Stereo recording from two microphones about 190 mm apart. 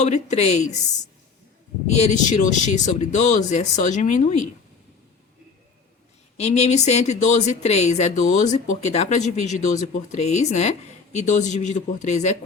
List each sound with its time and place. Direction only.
0.0 s speech: 35° left (ahead or behind)
1.9 s speech: 35° left (ahead or behind)
6.3 s speech: 35° left (ahead or behind)